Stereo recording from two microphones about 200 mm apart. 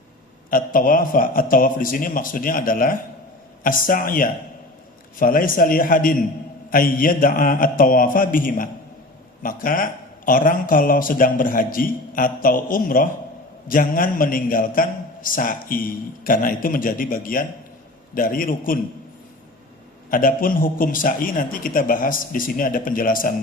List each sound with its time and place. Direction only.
0.5 s a man's voice: 45° left (ahead or behind)
20.1 s a man's voice: 45° left (ahead or behind)